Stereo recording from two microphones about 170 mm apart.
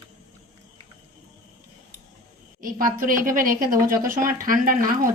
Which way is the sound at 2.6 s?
55° right (ahead or behind).